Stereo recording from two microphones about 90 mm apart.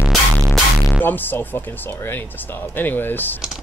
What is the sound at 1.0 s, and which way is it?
Speech, 20° left (ahead or behind).